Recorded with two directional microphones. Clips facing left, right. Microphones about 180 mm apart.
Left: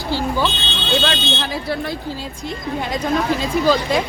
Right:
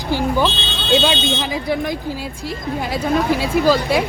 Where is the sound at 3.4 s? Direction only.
10° right (ahead or behind).